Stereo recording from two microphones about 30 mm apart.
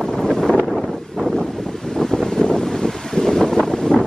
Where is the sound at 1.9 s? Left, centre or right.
Centre.